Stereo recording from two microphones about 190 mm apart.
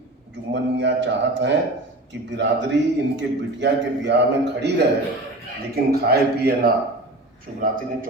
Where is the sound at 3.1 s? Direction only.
65° right (ahead or behind).